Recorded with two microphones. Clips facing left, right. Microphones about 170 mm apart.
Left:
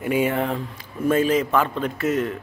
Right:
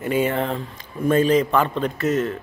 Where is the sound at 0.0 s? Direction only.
10° left (ahead or behind).